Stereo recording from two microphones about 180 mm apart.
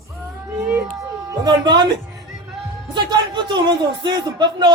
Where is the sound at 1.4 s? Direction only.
25° right (ahead or behind).